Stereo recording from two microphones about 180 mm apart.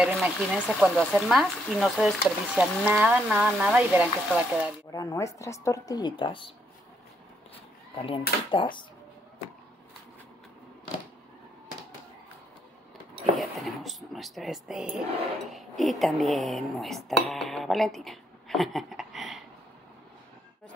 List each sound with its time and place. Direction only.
0.0 s speech: centre (ahead or behind)
4.9 s speech: 15° left (ahead or behind)
7.5 s a sound: 30° left (ahead or behind)
8.5 s speech: 25° left (ahead or behind)
13.4 s speech: centre (ahead or behind)